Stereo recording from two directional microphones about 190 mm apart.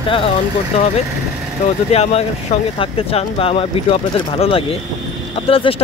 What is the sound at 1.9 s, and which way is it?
Speech, 35° left (ahead or behind).